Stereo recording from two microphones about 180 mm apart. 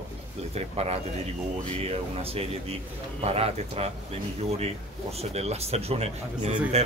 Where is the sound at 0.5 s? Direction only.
35° right (ahead or behind).